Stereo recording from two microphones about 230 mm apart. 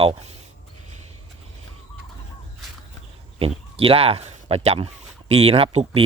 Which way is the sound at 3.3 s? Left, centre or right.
Right.